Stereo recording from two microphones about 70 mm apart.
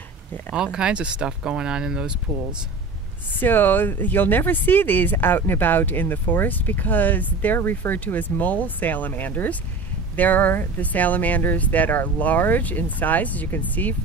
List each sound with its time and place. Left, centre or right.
0.6 s speech: centre
3.3 s speech: left